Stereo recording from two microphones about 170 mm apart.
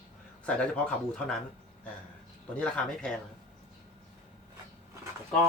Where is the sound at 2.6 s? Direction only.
5° left (ahead or behind).